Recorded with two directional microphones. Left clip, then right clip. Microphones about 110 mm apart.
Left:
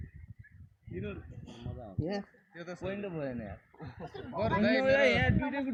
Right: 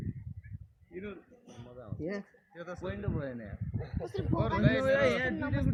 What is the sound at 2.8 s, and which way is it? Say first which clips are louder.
Speech: left 2 dB; 20° right (ahead or behind).